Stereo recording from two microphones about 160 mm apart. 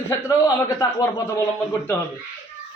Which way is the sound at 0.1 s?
20° left (ahead or behind).